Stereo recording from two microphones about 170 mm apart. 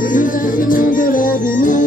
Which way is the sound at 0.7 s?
55° left (ahead or behind).